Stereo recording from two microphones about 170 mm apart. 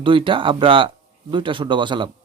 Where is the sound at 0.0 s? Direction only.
30° right (ahead or behind).